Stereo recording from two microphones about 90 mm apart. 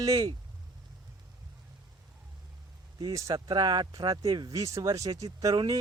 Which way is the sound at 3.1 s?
40° right (ahead or behind).